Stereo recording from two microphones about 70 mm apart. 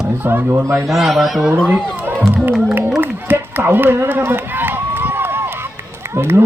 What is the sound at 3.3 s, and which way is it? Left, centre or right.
Run, right.